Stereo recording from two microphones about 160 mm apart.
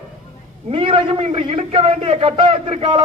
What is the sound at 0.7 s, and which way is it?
Speech, 35° right (ahead or behind).